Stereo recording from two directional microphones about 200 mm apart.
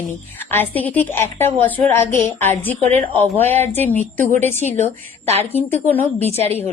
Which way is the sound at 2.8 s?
35° right (ahead or behind).